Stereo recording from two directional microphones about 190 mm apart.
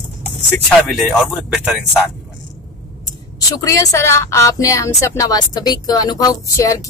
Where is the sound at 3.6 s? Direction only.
15° left (ahead or behind).